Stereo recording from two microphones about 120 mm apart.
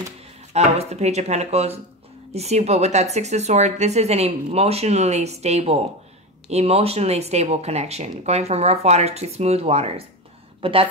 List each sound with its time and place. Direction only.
0.5 s speech: 65° right (ahead or behind)
10.6 s a woman's voice: 50° right (ahead or behind)